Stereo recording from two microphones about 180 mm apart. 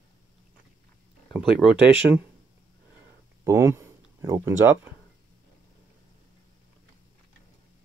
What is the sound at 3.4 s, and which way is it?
Speech, 15° right (ahead or behind).